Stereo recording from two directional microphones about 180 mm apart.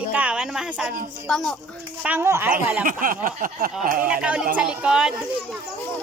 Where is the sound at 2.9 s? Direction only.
50° right (ahead or behind).